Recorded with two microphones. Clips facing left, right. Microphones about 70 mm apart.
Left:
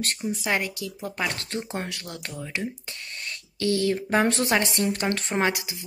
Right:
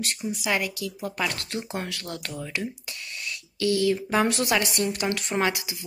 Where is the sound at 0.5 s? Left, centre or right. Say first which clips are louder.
Right 1 dB; left.